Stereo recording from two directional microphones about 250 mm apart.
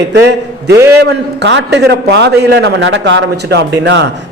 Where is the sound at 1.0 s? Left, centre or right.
Right.